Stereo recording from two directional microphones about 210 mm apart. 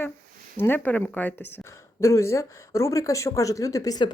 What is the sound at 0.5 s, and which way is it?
Speech, 10° left (ahead or behind).